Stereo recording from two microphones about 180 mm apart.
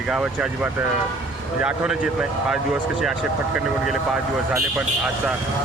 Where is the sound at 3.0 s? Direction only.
5° right (ahead or behind).